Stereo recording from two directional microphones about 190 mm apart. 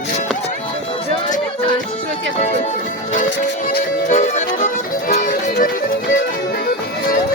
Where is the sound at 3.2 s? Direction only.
60° left (ahead or behind).